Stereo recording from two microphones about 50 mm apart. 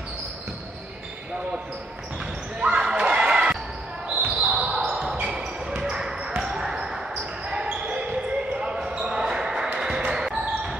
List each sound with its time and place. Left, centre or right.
2.6 s basketball bounce: centre